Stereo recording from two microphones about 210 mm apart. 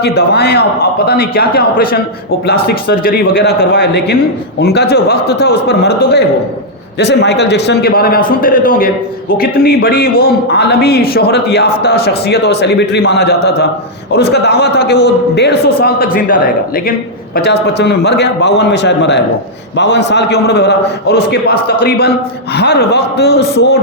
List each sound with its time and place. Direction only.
0.0 s a man's voice: 50° left (ahead or behind)
17.3 s a man's voice: 50° left (ahead or behind)